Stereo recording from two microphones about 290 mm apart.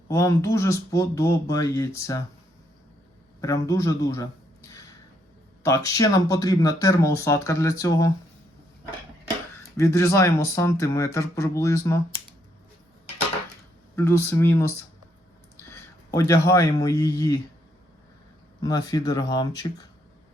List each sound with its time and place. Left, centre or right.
0.1 s speech: centre
3.4 s a man's voice: centre
9.7 s speech: centre
13.9 s speech: centre
16.1 s speech: centre
18.6 s speech: centre